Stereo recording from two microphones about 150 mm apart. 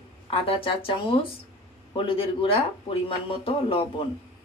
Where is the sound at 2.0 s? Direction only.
35° left (ahead or behind).